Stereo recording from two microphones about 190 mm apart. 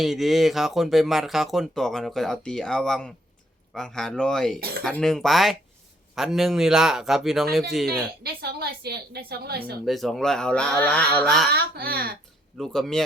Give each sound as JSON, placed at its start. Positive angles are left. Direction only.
{"t": 0.0, "sound": "speech", "side_deg": 0}
{"t": 7.9, "sound": "a woman's voice", "side_deg": -55}
{"t": 9.8, "sound": "speech", "side_deg": 0}
{"t": 11.5, "sound": "speech", "side_deg": -55}
{"t": 12.5, "sound": "speech", "side_deg": 0}